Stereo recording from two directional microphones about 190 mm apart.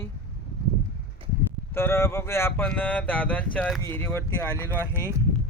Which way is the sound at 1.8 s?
15° left (ahead or behind).